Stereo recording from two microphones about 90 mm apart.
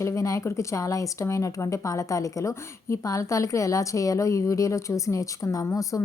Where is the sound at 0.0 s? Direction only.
35° left (ahead or behind).